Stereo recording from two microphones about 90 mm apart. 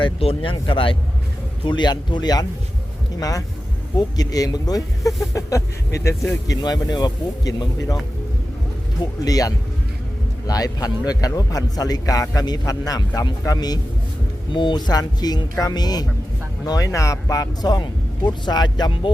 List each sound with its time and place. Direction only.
0.0 s speech: 85° left
1.6 s a man's voice: 55° left (ahead or behind); by 6.1 s 35° left (ahead or behind)
6.5 s speech: 45° left (ahead or behind)
9.2 s a man's voice: 40° left (ahead or behind)
14.5 s speech: 60° left (ahead or behind)